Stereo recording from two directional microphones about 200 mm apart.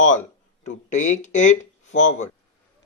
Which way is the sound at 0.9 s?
40° left (ahead or behind).